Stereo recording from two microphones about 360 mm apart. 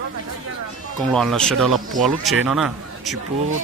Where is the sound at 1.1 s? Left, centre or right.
Centre.